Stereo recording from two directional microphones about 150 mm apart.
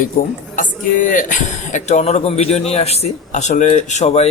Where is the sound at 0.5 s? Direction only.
60° left (ahead or behind).